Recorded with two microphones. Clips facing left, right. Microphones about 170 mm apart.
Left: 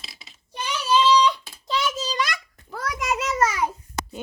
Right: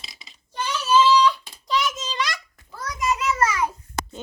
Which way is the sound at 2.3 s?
60° left (ahead or behind).